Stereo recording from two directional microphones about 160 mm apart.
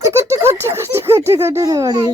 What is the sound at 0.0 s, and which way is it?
A child's voice, 20° right (ahead or behind).